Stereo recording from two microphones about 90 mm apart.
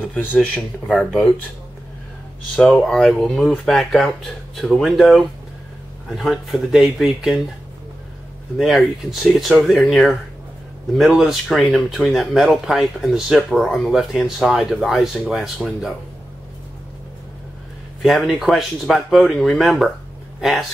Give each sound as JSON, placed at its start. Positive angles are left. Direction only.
{"t": 0.0, "sound": "speech", "side_deg": 20}
{"t": 2.5, "sound": "speech", "side_deg": 10}
{"t": 8.5, "sound": "speech", "side_deg": 0}
{"t": 18.0, "sound": "speech", "side_deg": 0}